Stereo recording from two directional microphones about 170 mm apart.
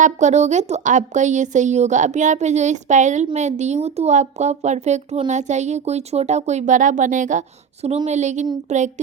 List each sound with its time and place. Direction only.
0.0 s a woman's voice: 45° right (ahead or behind)